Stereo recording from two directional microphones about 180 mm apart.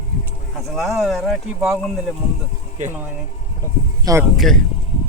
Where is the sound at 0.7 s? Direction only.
Centre (ahead or behind).